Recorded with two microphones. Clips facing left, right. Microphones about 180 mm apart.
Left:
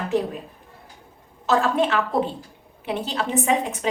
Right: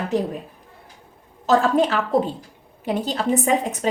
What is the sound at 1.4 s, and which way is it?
A woman's voice, 40° right (ahead or behind).